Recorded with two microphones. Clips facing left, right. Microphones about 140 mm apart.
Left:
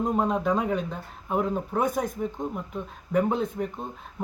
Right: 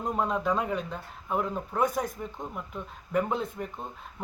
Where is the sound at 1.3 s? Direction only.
15° left (ahead or behind).